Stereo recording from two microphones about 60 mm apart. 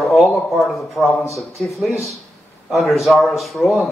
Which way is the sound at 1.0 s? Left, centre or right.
Left.